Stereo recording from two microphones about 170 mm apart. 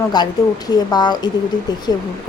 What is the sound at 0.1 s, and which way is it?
Speech, 25° left (ahead or behind).